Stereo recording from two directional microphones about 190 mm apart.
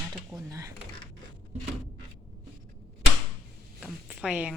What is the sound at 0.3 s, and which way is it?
Speech, 15° right (ahead or behind).